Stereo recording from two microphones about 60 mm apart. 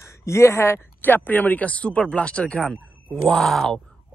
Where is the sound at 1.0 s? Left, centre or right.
Left.